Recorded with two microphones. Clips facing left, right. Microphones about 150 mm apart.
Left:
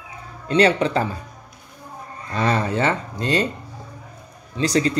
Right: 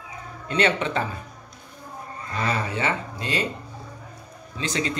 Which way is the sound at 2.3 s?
35° left (ahead or behind).